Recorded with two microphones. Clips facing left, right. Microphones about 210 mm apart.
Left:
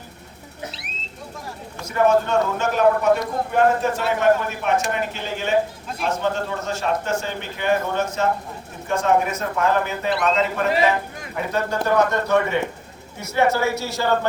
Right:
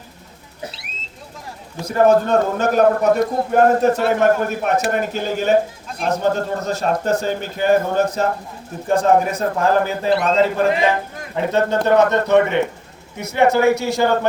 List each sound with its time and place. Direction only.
1.8 s a man's voice: 35° right (ahead or behind); by 14.1 s 15° right (ahead or behind)